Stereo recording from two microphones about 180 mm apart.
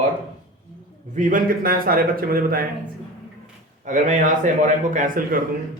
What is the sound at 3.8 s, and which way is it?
A man's voice, 45° right (ahead or behind).